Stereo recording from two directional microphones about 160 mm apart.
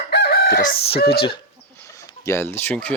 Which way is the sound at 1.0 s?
80° left.